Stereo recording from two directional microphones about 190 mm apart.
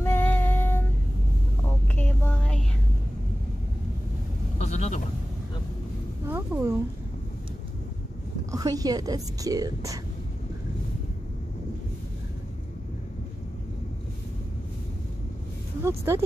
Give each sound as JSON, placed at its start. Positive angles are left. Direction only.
{"t": 0.0, "sound": "child singing", "side_deg": 10}
{"t": 2.0, "sound": "a sound", "side_deg": 10}
{"t": 4.6, "sound": "sheep", "side_deg": 35}
{"t": 6.2, "sound": "a sound", "side_deg": -10}
{"t": 8.5, "sound": "speech", "side_deg": -20}
{"t": 15.8, "sound": "speech", "side_deg": -15}